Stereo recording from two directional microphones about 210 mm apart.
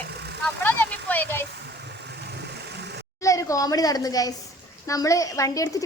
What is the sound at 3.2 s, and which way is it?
A woman's voice, 15° left (ahead or behind).